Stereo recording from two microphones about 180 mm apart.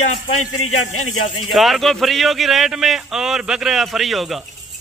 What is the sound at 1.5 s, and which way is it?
A man's voice, centre (ahead or behind).